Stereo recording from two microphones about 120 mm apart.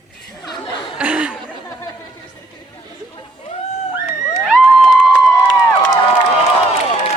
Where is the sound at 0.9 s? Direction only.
10° right (ahead or behind).